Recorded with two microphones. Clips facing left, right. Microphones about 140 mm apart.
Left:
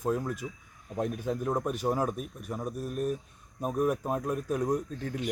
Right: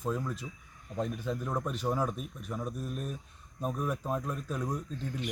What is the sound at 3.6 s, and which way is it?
Speech, 10° left (ahead or behind).